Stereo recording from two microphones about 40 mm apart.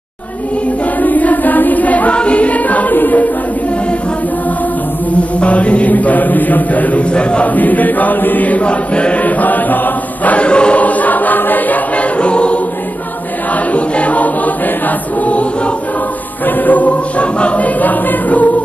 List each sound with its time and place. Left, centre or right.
1.0 s choir: left
2.1 s music: left
2.9 s chant: left
5.4 s mantra: left
7.1 s chant: left
7.4 s chant: left
9.2 s chant: left
10.2 s mantra: left
10.8 s choir: left
12.2 s choir: left
13.7 s choir: left
15.2 s mantra: left
16.4 s mantra: left
17.7 s chant: left